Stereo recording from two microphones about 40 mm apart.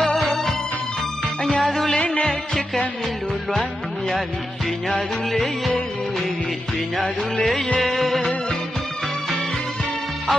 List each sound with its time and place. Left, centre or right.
0.0 s music: centre
4.9 s music: centre
7.8 s music: centre
8.2 s music: centre